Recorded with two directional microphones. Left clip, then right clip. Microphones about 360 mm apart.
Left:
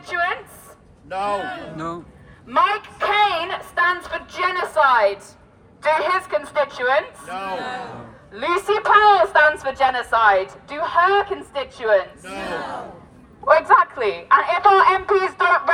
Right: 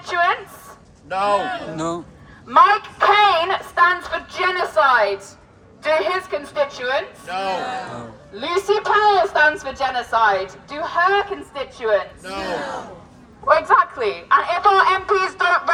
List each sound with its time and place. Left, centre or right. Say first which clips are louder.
0.1 s a sound: right 4 dB; centre
1.1 s a man's voice: right 4 dB; right
1.7 s a woman's voice: right 4 dB; centre
7.3 s a man's voice: right 5 dB; right
8.4 s a woman's voice: even; left
12.2 s a woman's voice: right 3 dB; centre
13.4 s a woman's voice: left 1 dB; left